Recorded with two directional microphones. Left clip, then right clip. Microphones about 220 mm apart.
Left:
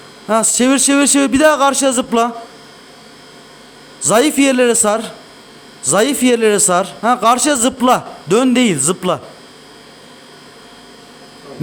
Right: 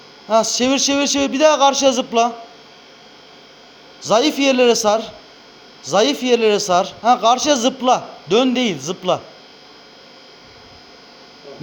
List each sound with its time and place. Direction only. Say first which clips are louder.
0.6 s speech: left 4 dB; 25° left (ahead or behind)
4.1 s speech: left 3 dB; 25° left (ahead or behind)